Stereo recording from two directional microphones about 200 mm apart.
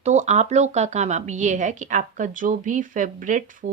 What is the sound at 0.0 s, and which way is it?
A woman's voice, 35° right (ahead or behind).